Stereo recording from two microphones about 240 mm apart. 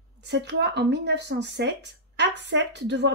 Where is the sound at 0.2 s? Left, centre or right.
Right.